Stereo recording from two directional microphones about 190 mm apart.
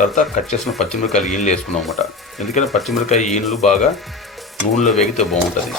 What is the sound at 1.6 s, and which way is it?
Speech, centre (ahead or behind).